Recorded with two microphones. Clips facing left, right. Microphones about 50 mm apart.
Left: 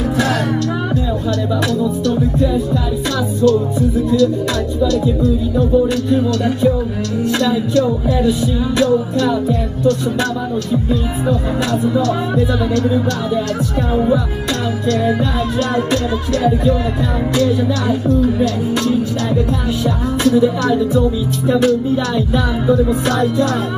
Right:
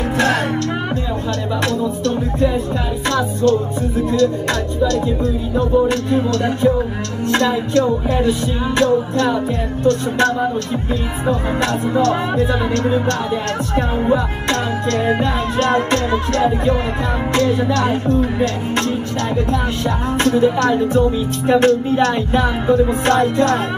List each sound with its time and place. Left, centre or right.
4.8 s music: right
11.9 s music: right
15.7 s music: right
17.4 s speech: right
20.2 s music: right